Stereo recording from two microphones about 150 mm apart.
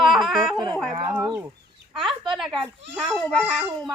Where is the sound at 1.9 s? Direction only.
Centre (ahead or behind).